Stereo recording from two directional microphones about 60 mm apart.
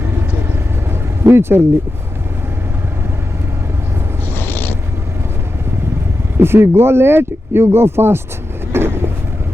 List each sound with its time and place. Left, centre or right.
1.2 s speech: right
4.4 s a sound: left
6.4 s speech: right
8.7 s vehicle: right